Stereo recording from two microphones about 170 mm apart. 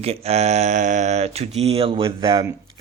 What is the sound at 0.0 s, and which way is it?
Speech, 35° right (ahead or behind).